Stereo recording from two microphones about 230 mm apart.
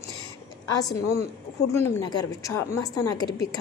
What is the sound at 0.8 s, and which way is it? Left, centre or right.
A woman's voice, centre.